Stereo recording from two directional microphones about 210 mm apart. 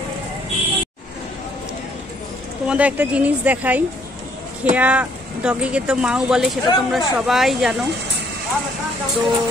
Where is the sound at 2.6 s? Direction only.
5° right (ahead or behind).